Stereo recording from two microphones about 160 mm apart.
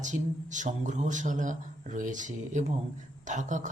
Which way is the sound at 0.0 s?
50° right (ahead or behind).